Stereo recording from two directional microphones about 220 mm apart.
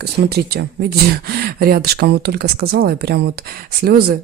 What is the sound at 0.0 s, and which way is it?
Speech, 45° right (ahead or behind).